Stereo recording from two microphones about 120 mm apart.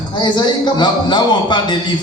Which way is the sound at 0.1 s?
40° left (ahead or behind).